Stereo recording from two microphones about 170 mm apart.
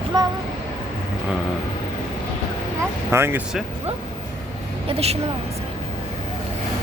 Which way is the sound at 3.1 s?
15° right (ahead or behind).